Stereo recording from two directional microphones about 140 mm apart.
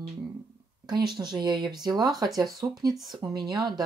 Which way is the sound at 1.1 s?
30° right (ahead or behind).